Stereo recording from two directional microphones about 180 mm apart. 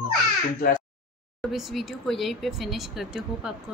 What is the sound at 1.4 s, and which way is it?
Speech, centre (ahead or behind).